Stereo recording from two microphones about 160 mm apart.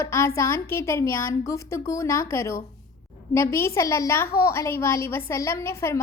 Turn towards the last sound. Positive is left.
turn(degrees=15)  # may be behind; listen again after turning